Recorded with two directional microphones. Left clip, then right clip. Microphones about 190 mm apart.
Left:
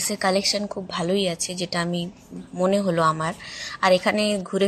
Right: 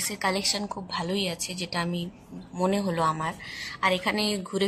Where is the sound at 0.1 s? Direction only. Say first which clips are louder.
Left 6 dB; 20° left (ahead or behind).